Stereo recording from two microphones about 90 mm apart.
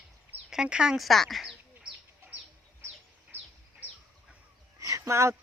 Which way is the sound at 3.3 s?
20° right (ahead or behind).